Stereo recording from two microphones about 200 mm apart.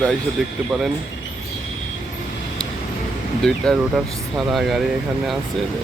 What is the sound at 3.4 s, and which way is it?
Speech, centre (ahead or behind).